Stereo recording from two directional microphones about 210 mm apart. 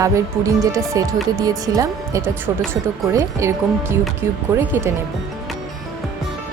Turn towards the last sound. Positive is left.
turn(degrees=-10)  # may be behind; listen again after turning